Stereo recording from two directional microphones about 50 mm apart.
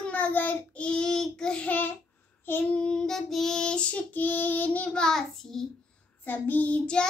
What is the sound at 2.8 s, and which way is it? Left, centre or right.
Female singing, centre.